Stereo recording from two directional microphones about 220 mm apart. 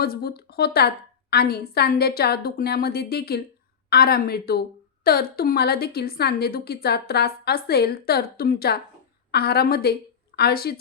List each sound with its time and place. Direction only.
0.0 s a woman's voice: 45° left (ahead or behind)